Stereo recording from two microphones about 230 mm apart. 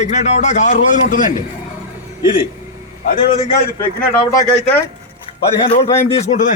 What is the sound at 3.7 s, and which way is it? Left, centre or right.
Speech, centre.